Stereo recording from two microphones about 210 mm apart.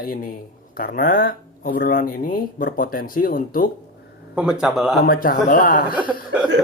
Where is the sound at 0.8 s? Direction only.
45° left (ahead or behind).